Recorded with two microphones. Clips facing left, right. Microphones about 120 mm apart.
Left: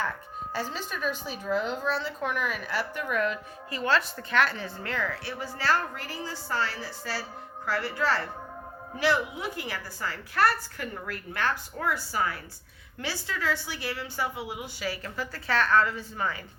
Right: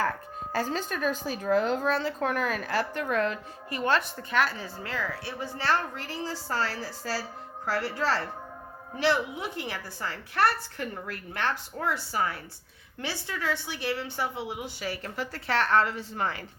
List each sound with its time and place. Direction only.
0.5 s a woman's voice: 45° right (ahead or behind)
4.3 s a woman's voice: 10° right (ahead or behind)
5.2 s a woman's voice: 20° right (ahead or behind)